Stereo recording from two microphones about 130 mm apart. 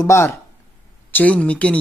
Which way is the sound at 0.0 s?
20° left (ahead or behind).